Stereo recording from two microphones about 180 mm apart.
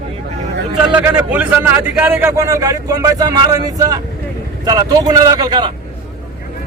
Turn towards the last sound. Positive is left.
turn(degrees=-25)  # may be behind; listen again after turning